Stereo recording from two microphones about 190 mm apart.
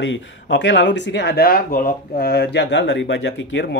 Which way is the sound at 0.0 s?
75° left (ahead or behind).